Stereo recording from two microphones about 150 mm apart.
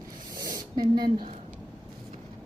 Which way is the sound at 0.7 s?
30° right (ahead or behind).